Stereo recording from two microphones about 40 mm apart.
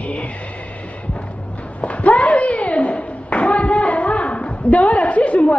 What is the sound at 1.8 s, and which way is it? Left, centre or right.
Clapping, left.